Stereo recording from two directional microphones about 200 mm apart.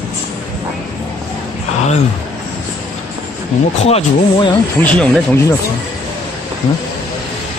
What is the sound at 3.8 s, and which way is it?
Speech, 30° left (ahead or behind).